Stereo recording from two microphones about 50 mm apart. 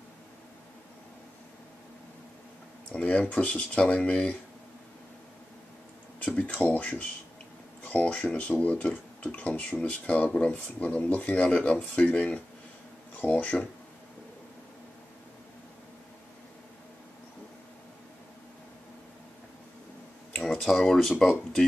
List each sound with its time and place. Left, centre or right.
2.9 s speech: left
6.1 s speech: left
20.5 s speech: centre